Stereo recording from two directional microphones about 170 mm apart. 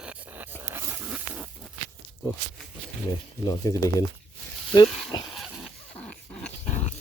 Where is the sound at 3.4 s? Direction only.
20° left (ahead or behind).